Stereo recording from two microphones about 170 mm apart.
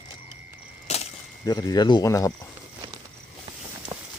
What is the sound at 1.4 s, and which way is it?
Speech, 25° left (ahead or behind).